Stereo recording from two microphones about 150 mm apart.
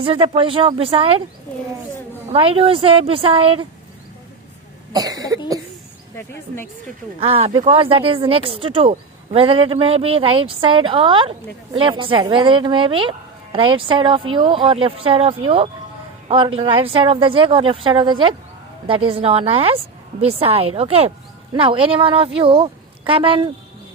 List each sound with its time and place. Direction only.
0.0 s speech: 35° right (ahead or behind)
2.3 s speech: 40° right (ahead or behind)
4.9 s cough: 25° right (ahead or behind)
7.2 s speech: 40° right (ahead or behind)